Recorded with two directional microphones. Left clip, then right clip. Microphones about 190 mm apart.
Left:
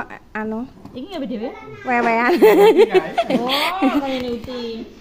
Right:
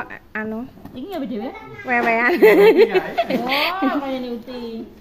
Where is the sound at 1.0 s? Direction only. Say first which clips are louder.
Left 1 dB; 25° left (ahead or behind).